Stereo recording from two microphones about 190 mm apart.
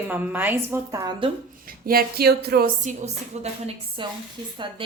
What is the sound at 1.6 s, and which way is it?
Speech, 50° right (ahead or behind).